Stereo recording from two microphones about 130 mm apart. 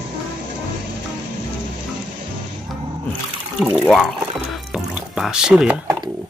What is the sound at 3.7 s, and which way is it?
Speech, 5° left (ahead or behind).